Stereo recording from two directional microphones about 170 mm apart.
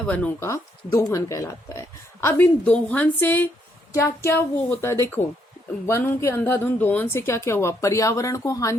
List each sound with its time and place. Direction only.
0.1 s a woman's voice: 10° left (ahead or behind)